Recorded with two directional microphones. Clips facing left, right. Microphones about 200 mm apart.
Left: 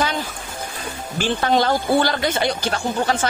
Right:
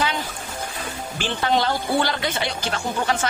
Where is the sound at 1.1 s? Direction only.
45° left (ahead or behind).